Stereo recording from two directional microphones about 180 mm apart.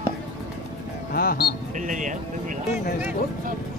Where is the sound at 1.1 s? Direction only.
55° left (ahead or behind).